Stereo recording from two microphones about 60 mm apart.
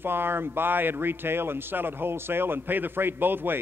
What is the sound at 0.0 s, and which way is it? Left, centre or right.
Speech, right.